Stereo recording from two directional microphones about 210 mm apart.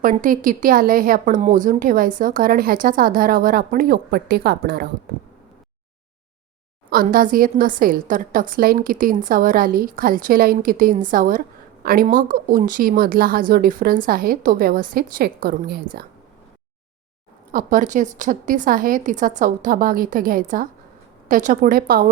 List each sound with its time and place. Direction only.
0.0 s a woman's voice: 40° right (ahead or behind)
6.9 s a woman's voice: 45° right (ahead or behind)
17.5 s a woman's voice: 40° right (ahead or behind)